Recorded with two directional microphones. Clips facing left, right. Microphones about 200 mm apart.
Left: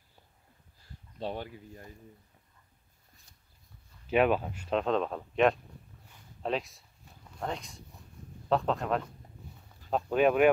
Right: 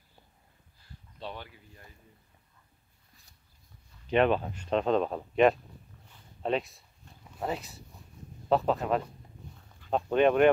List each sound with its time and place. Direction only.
1.2 s speech: 45° left (ahead or behind)
4.1 s speech: 5° left (ahead or behind)